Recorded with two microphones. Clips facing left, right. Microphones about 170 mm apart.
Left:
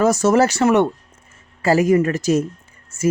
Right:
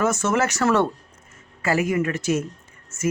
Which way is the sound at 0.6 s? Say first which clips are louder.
Left 1 dB; 20° left (ahead or behind).